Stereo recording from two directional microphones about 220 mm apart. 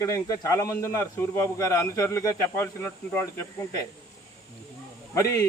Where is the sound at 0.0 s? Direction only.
15° left (ahead or behind).